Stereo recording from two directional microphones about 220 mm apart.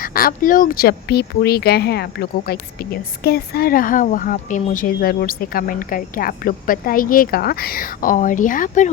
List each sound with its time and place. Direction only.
0.0 s speech: 40° left (ahead or behind)